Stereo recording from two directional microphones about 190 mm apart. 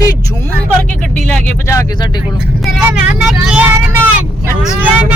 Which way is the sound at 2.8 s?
5° right (ahead or behind).